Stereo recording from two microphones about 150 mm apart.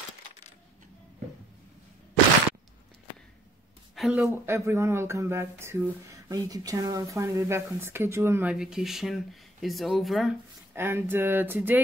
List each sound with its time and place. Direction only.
3.9 s speech: 5° right (ahead or behind)
10.7 s speech: 15° right (ahead or behind)